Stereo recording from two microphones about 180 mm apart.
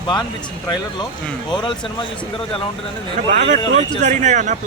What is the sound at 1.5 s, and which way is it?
Speech, 25° left (ahead or behind).